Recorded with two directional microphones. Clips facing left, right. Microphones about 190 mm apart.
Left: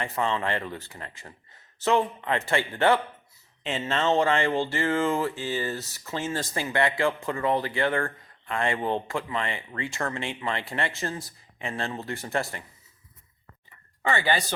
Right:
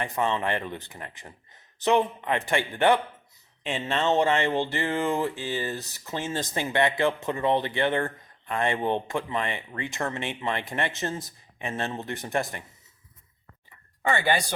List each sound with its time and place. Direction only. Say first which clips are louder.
0.0 s speech: right 1 dB; 20° right (ahead or behind)
14.1 s speech: right 1 dB; 15° right (ahead or behind)